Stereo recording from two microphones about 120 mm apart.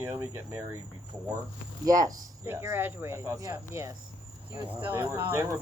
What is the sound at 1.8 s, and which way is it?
Speech, 30° right (ahead or behind).